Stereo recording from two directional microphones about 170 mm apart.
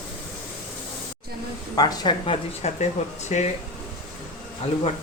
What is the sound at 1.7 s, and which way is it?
Speech, 25° left (ahead or behind).